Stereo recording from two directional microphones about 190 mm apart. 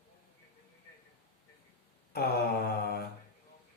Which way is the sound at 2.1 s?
55° left (ahead or behind).